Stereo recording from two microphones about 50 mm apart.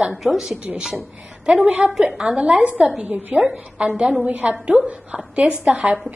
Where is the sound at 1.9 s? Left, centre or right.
Centre.